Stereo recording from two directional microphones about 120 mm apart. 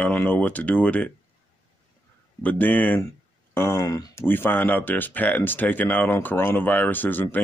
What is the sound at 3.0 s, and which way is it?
Speech, 25° left (ahead or behind).